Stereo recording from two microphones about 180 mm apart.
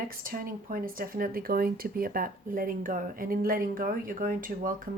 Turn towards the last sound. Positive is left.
turn(degrees=-50)  # may be behind; listen again after turning